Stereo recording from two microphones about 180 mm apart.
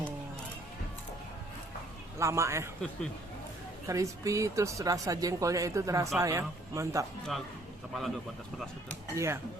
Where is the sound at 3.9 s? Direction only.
20° right (ahead or behind).